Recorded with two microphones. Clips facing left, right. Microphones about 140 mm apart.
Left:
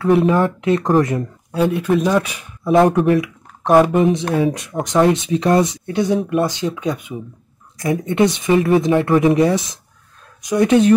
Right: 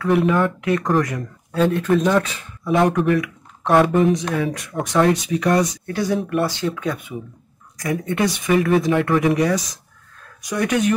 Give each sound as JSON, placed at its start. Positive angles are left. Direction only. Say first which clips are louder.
{"t": 0.0, "sound": "speech", "louder": "left 3 dB", "side_deg": 30}
{"t": 1.5, "sound": "speech", "louder": "left 1 dB", "side_deg": 10}
{"t": 2.6, "sound": "speech", "louder": "left 4 dB", "side_deg": 30}